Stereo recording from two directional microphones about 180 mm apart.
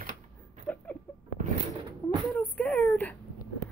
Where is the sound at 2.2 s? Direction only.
5° left (ahead or behind).